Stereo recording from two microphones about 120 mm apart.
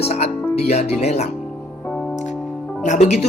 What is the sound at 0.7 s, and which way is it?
Speech, 65° left (ahead or behind).